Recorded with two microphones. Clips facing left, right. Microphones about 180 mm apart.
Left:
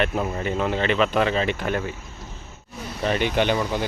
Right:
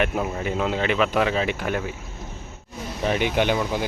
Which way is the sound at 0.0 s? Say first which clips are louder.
Even; 5° right (ahead or behind).